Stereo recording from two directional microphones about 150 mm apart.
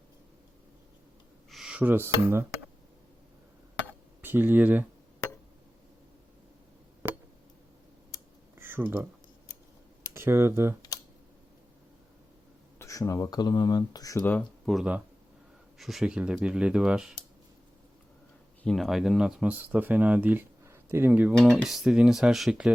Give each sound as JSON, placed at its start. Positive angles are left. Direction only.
{"t": 1.5, "sound": "speech", "side_deg": -5}
{"t": 3.8, "sound": "a sound", "side_deg": -15}
{"t": 8.5, "sound": "a sound", "side_deg": -15}
{"t": 10.2, "sound": "speech", "side_deg": -15}
{"t": 12.8, "sound": "speech", "side_deg": 20}
{"t": 14.3, "sound": "speech", "side_deg": 5}
{"t": 18.6, "sound": "speech", "side_deg": 0}